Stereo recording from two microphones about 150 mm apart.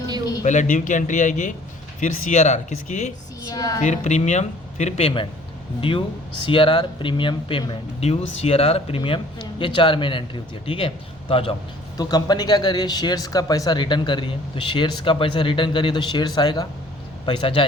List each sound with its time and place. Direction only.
0.4 s a man's voice: 55° left (ahead or behind)
3.4 s speech: 25° left (ahead or behind)
3.8 s speech: 50° left (ahead or behind)
11.9 s speech: 25° left (ahead or behind)